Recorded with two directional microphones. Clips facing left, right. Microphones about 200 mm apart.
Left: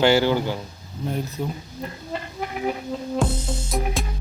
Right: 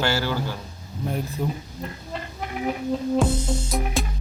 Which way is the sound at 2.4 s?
Centre (ahead or behind).